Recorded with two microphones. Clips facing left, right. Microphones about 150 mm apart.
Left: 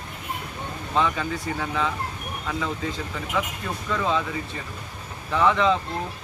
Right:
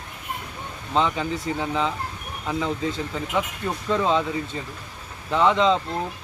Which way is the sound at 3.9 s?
25° right (ahead or behind).